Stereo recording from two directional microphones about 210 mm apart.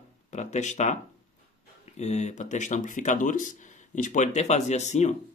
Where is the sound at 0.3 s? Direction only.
35° left (ahead or behind).